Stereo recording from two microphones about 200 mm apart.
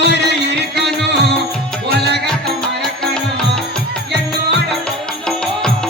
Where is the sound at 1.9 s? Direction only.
55° right (ahead or behind).